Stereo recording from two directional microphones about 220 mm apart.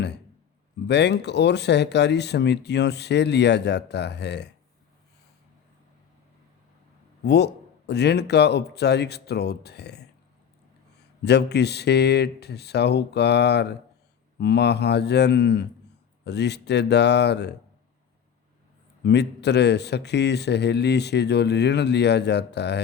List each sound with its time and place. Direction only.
0.9 s speech: 50° left (ahead or behind)
7.3 s speech: 50° left (ahead or behind)
11.2 s speech: 50° left (ahead or behind)
19.0 s speech: 50° left (ahead or behind)